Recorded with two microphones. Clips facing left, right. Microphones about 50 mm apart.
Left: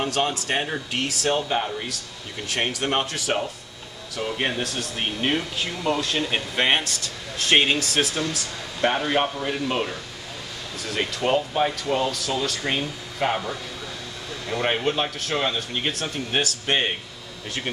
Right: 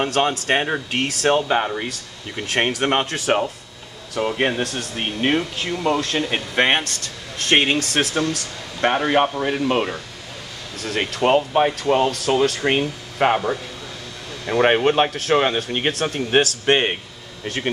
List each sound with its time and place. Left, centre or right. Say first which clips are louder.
0.0 s speech: right 4 dB; right
4.1 s speech: right 6 dB; right
4.6 s speech: right 3 dB; right
4.9 s speech: right 4 dB; right
6.8 s speech: right 1 dB; right
8.9 s speech: right 5 dB; right
11.0 s speech: right 5 dB; right